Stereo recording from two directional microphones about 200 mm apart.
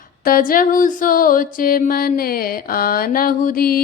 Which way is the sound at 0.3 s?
45° left (ahead or behind).